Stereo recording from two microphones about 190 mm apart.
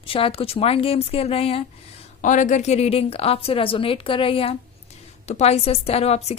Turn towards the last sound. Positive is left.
turn(degrees=35)  # may be behind; listen again after turning